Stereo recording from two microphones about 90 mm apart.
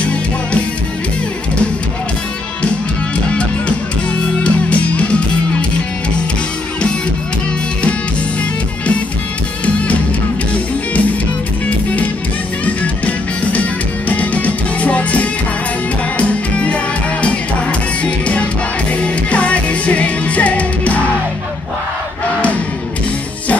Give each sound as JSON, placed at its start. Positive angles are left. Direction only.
{"t": 0.0, "sound": "music", "side_deg": 15}
{"t": 4.4, "sound": "music", "side_deg": 15}
{"t": 12.6, "sound": "music", "side_deg": 15}
{"t": 18.0, "sound": "music", "side_deg": 15}